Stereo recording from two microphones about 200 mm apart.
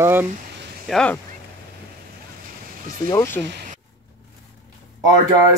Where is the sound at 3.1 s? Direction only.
10° left (ahead or behind).